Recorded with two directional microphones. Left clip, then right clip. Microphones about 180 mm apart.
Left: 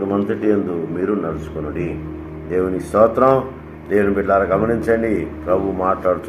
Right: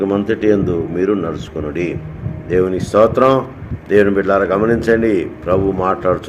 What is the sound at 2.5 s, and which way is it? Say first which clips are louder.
A man's voice: right 4 dB; 60° right (ahead or behind).